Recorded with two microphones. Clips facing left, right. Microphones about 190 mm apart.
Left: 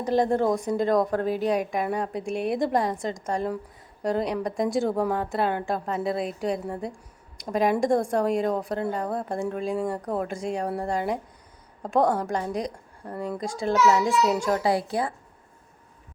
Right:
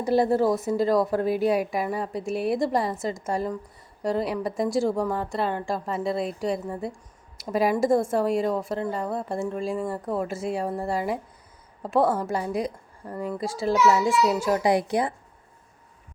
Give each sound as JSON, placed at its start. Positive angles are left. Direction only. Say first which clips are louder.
{"t": 0.0, "sound": "a woman's voice", "louder": "right 1 dB", "side_deg": -10}
{"t": 14.6, "sound": "a woman's voice", "louder": "right 2 dB", "side_deg": -20}